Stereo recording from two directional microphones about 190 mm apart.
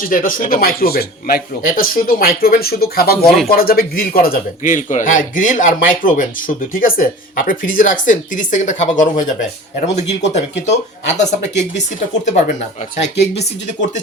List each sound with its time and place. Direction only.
0.1 s speech: 45° left (ahead or behind)